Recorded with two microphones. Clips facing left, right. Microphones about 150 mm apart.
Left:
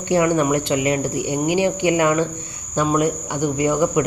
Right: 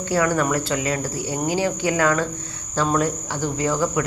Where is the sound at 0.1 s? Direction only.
20° left (ahead or behind).